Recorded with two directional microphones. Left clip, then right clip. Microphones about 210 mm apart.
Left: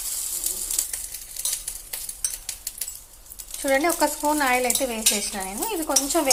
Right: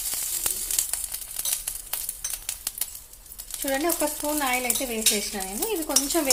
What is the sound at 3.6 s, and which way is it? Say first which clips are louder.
Speech: left 5 dB; 15° right (ahead or behind).